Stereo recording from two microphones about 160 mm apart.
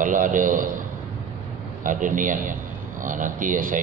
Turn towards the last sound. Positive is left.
turn(degrees=-55)  # may be behind; listen again after turning